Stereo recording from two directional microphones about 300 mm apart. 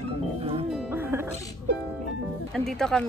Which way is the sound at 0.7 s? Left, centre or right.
Centre.